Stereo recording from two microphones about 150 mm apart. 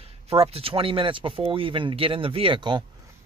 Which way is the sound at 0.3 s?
40° right (ahead or behind).